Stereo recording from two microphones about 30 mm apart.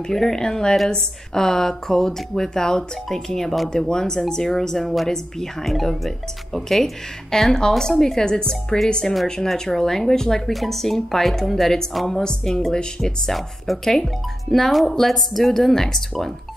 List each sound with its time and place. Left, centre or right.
0.1 s speech: centre
0.4 s a woman's voice: left
4.8 s a woman's voice: centre
5.1 s a woman's voice: centre
10.4 s a woman's voice: centre
12.1 s a woman's voice: left
13.0 s a woman's voice: centre